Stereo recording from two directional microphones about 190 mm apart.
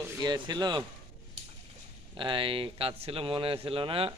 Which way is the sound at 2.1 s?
25° right (ahead or behind).